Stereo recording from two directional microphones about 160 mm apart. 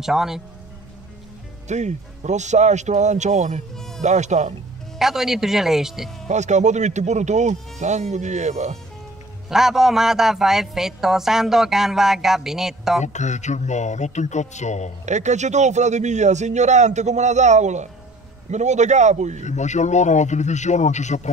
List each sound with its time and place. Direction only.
0.0 s a woman's voice: 5° right (ahead or behind)
1.7 s a man's voice: 45° right (ahead or behind)
3.7 s music: 5° left (ahead or behind)
4.0 s a man's voice: 45° right (ahead or behind)
4.9 s a woman's voice: centre (ahead or behind)
6.2 s a man's voice: 45° right (ahead or behind)
9.5 s a woman's voice: 5° right (ahead or behind)
13.0 s speech: 45° left (ahead or behind)
15.0 s a man's voice: 45° right (ahead or behind)
19.4 s speech: 45° left (ahead or behind)